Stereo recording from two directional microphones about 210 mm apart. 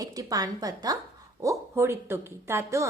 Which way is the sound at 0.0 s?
15° right (ahead or behind).